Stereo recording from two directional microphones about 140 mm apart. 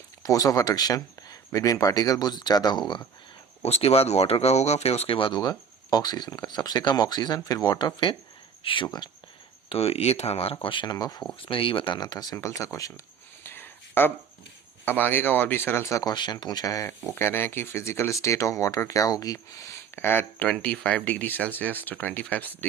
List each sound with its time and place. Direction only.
0.2 s speech: 25° left (ahead or behind)
3.6 s speech: 45° left (ahead or behind)
9.6 s speech: 45° left (ahead or behind); by 11.2 s 30° left (ahead or behind)
11.4 s speech: 40° left (ahead or behind); by 12.9 s 25° left (ahead or behind)
13.4 s a sound: 15° left (ahead or behind)
14.8 s speech: 15° left (ahead or behind)